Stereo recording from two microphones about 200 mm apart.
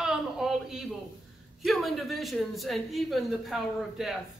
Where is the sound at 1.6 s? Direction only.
Centre (ahead or behind).